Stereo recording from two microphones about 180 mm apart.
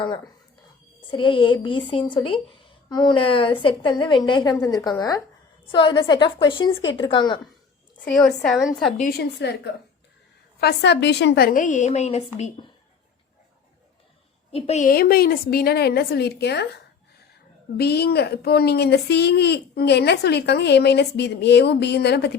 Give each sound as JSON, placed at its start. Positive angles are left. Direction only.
{"t": 1.0, "sound": "a woman's voice", "side_deg": 25}
{"t": 8.0, "sound": "a woman's voice", "side_deg": 5}
{"t": 9.0, "sound": "a woman's voice", "side_deg": 55}
{"t": 14.5, "sound": "a woman's voice", "side_deg": 35}
{"t": 14.8, "sound": "a woman's voice", "side_deg": 55}
{"t": 17.7, "sound": "speech", "side_deg": 65}